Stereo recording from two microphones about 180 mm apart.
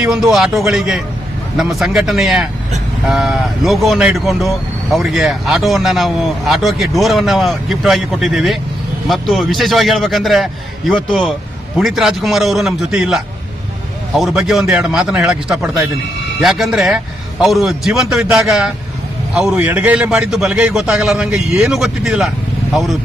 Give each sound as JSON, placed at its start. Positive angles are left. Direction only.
{"t": 0.0, "sound": "speech", "side_deg": -5}